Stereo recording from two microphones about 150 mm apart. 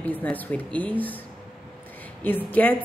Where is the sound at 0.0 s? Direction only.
10° left (ahead or behind).